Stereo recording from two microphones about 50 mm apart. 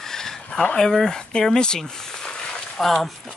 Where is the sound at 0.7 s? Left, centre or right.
Centre.